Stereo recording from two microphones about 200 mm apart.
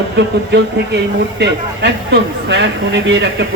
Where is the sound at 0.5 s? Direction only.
60° right (ahead or behind).